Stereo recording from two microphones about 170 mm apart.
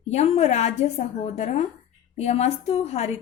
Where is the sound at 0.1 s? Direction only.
40° left (ahead or behind).